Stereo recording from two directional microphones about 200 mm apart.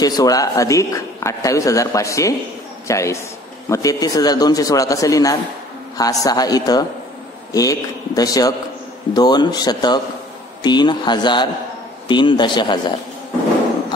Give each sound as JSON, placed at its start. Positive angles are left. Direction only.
{"t": 0.0, "sound": "a man's voice", "side_deg": 20}